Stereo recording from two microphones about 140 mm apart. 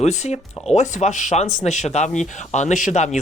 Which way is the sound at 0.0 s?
55° left (ahead or behind).